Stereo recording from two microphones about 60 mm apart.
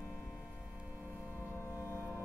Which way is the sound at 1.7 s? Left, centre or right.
Right.